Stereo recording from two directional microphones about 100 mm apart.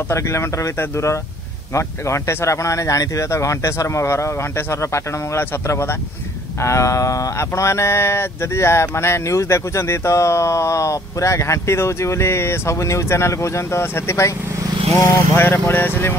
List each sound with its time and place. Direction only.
0.1 s speech: 30° left (ahead or behind)